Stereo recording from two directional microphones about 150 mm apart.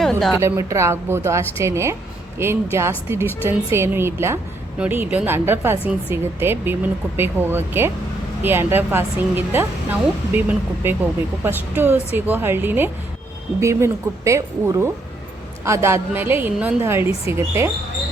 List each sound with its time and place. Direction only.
0.0 s a woman's voice: 5° left (ahead or behind)
0.3 s speech: 20° right (ahead or behind)